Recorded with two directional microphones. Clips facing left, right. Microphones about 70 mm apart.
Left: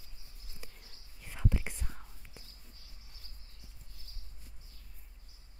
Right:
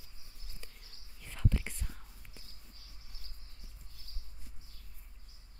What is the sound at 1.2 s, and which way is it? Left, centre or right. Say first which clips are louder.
Whispering: even; centre.